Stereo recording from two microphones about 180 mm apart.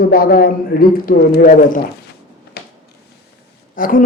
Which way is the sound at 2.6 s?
60° left (ahead or behind).